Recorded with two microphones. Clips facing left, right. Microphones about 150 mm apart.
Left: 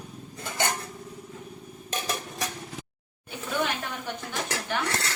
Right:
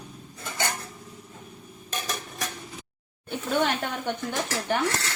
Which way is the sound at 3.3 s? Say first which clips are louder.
Right 4 dB; 60° right (ahead or behind).